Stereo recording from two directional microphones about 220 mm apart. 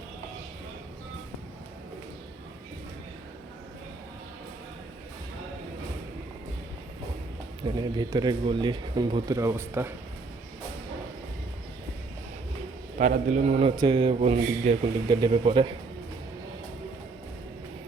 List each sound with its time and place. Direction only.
7.8 s speech: 20° right (ahead or behind)
13.0 s a man's voice: 35° right (ahead or behind)